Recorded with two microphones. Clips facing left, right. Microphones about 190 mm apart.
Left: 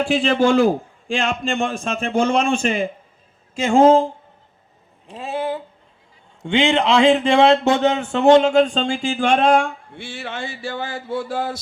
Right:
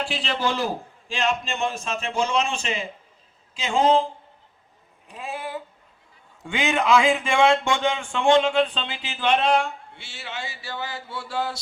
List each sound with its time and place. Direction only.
0.0 s speech: 50° left (ahead or behind)
5.0 s speech: 35° left (ahead or behind); by 11.6 s 50° left (ahead or behind)